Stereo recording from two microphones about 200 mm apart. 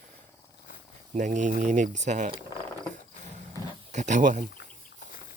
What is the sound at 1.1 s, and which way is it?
Speech, 40° right (ahead or behind).